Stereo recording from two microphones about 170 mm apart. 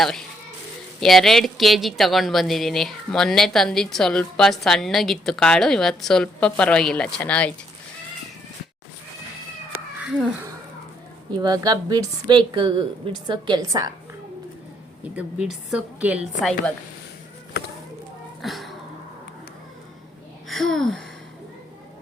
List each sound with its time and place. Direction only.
0.0 s a woman's voice: centre (ahead or behind)
10.0 s speech: 5° right (ahead or behind)
11.3 s a woman's voice: 25° right (ahead or behind)
15.1 s a woman's voice: 5° right (ahead or behind)
16.4 s a woman's voice: 5° left (ahead or behind)
18.4 s speech: centre (ahead or behind)
20.5 s a woman's voice: centre (ahead or behind)